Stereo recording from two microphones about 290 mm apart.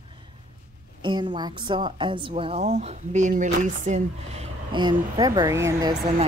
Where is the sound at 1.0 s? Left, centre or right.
Centre.